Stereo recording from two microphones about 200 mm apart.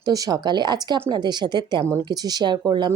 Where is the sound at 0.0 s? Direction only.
20° right (ahead or behind).